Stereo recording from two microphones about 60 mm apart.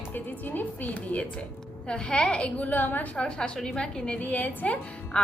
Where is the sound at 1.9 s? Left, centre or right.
Centre.